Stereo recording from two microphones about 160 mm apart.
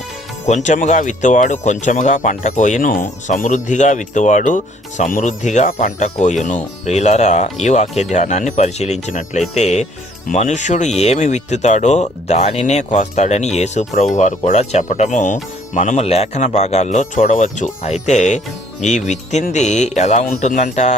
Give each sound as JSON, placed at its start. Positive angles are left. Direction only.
{"t": 0.4, "sound": "speech", "side_deg": 45}